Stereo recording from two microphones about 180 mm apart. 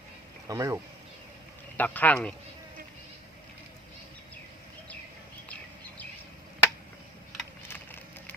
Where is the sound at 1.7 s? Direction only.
10° left (ahead or behind).